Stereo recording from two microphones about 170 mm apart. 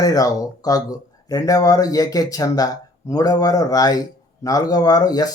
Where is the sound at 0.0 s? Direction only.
20° left (ahead or behind).